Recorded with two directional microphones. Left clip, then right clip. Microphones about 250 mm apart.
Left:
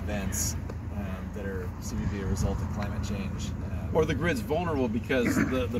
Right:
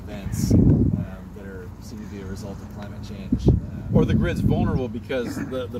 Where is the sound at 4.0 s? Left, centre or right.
Centre.